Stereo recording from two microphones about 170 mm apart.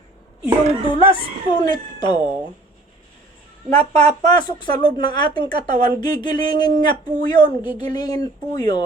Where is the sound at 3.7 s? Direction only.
40° right (ahead or behind).